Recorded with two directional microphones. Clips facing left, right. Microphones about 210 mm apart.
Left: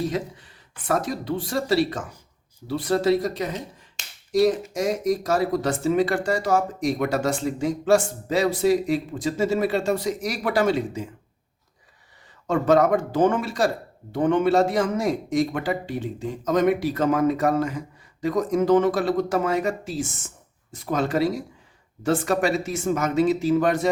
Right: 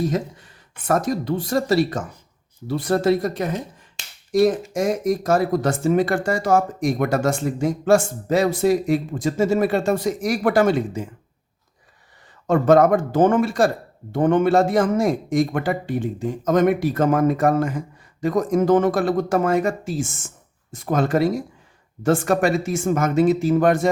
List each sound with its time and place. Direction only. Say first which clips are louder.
0.1 s speech: right 3 dB; 45° right (ahead or behind)
12.5 s speech: right 4 dB; 50° right (ahead or behind)